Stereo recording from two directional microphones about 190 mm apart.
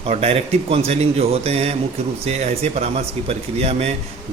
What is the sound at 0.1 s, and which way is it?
A man's voice, 30° right (ahead or behind).